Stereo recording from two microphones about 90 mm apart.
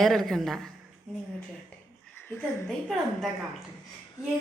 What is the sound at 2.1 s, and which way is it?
Speech, 25° left (ahead or behind).